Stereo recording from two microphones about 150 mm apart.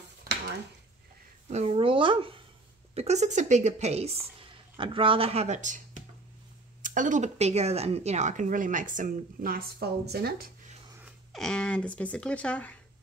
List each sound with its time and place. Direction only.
0.2 s a sound: 90° right
1.5 s a woman's voice: 45° right (ahead or behind); by 10.5 s 90° right
11.3 s speech: 5° left (ahead or behind)